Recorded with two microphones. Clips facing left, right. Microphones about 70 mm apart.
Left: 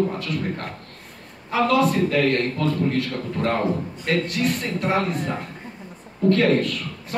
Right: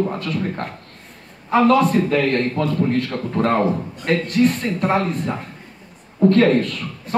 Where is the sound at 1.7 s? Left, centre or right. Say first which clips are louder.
Right 2 dB; right.